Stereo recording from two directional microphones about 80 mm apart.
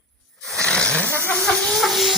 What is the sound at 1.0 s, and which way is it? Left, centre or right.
Hiss, left.